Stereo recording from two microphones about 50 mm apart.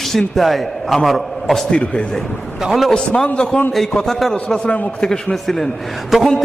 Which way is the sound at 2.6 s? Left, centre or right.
Centre.